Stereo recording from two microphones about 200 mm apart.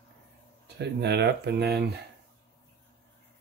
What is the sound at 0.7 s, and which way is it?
Speech, 55° right (ahead or behind).